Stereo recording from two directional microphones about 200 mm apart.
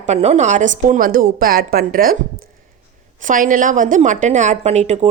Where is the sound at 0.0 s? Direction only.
35° right (ahead or behind).